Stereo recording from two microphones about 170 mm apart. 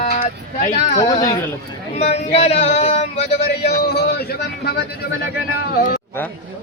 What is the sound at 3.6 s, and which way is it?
Speech, 70° left (ahead or behind).